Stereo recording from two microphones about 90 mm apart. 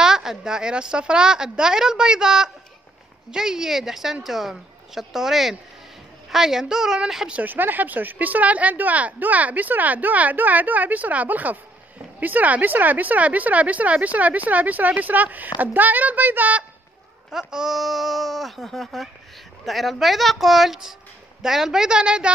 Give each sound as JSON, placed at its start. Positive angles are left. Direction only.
{"t": 0.0, "sound": "speech", "side_deg": -5}
{"t": 7.3, "sound": "speech", "side_deg": -20}
{"t": 17.3, "sound": "speech", "side_deg": -5}